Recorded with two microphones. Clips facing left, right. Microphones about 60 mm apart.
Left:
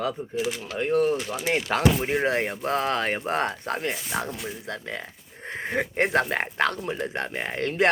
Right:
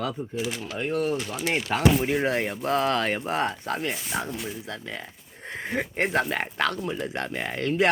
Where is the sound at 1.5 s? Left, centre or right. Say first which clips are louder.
Left 2 dB; left.